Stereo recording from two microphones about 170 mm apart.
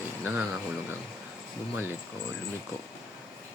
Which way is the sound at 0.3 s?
10° right (ahead or behind).